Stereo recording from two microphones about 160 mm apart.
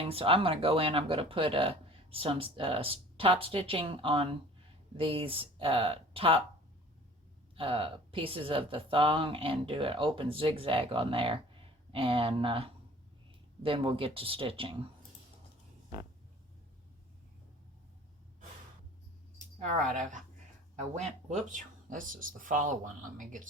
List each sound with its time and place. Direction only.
0.1 s speech: 35° right (ahead or behind)
7.5 s speech: 35° right (ahead or behind)
19.4 s speech: 50° right (ahead or behind)